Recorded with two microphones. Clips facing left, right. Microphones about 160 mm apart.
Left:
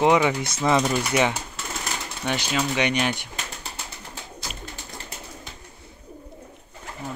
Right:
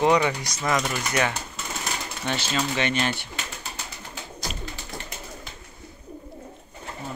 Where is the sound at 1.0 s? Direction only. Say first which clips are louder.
Left 3 dB; 15° left (ahead or behind).